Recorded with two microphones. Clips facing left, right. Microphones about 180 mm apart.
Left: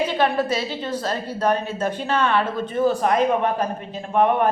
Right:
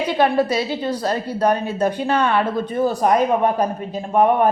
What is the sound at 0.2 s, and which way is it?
A woman's voice, 35° right (ahead or behind).